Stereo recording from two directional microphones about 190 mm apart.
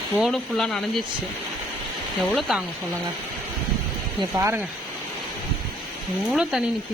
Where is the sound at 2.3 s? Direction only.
Centre (ahead or behind).